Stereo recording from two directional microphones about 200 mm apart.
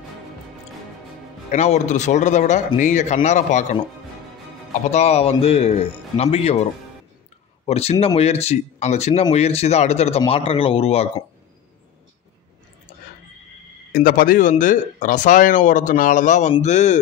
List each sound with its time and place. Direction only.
1.5 s speech: 35° left (ahead or behind)
4.9 s speech: 30° left (ahead or behind)
7.6 s speech: 30° left (ahead or behind)
13.9 s speech: 45° left (ahead or behind)